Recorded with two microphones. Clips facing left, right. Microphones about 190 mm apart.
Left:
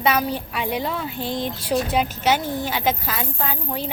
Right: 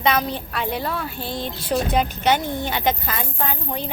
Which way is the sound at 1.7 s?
5° left (ahead or behind).